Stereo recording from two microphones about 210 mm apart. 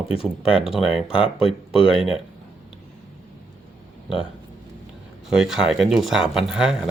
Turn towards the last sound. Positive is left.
turn(degrees=-5)  # may be behind; listen again after turning